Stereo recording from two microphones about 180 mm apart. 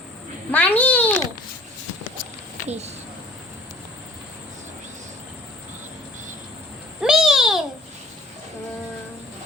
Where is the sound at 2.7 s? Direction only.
35° right (ahead or behind).